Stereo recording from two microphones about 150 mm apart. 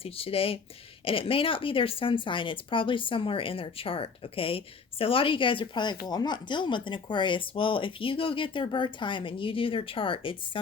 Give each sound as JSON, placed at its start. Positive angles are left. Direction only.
{"t": 0.0, "sound": "a woman's voice", "side_deg": 40}